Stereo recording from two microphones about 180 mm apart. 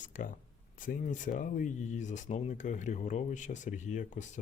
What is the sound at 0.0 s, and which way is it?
Speech, 45° left (ahead or behind).